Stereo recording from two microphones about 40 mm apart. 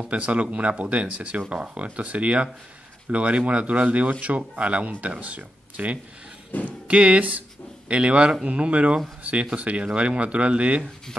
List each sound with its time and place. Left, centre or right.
0.1 s speech: right
6.5 s speech: left
6.9 s speech: right